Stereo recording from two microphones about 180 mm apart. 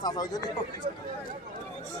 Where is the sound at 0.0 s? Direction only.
20° left (ahead or behind).